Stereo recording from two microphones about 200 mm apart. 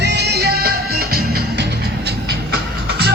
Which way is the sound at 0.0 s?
55° right (ahead or behind).